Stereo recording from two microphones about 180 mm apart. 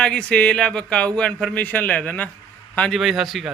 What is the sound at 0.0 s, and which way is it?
Speech, 5° left (ahead or behind).